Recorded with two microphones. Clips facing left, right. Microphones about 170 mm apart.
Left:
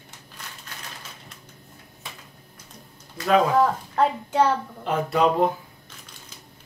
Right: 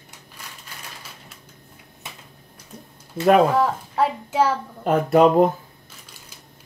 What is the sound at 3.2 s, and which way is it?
Speech, 55° right (ahead or behind).